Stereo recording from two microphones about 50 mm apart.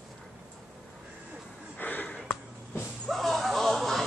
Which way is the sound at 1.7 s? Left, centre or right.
Left.